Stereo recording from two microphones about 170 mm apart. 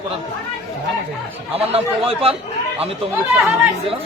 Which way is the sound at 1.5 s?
35° right (ahead or behind).